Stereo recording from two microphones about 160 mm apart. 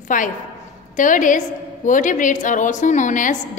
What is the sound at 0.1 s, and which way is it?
A woman's voice, 55° left (ahead or behind).